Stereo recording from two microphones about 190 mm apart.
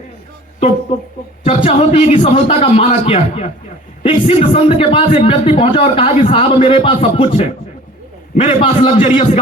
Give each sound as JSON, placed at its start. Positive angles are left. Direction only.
{"t": 1.5, "sound": "a man's voice", "side_deg": 30}